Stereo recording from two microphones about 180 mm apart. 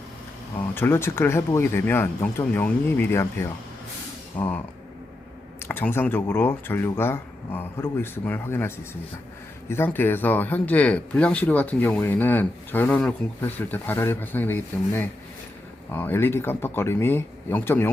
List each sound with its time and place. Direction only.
0.7 s speech: 10° left (ahead or behind)